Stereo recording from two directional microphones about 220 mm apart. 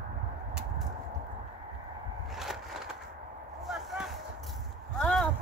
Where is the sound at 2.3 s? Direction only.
Centre (ahead or behind).